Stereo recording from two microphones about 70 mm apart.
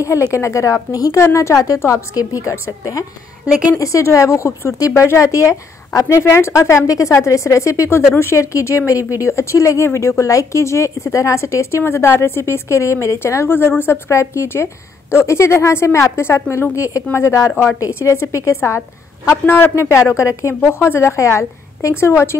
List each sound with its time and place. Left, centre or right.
0.3 s speech: left
0.9 s a woman's voice: left
1.2 s speech: left
2.4 s a woman's voice: left
2.8 s a woman's voice: left
19.4 s a woman's voice: left
21.2 s a woman's voice: left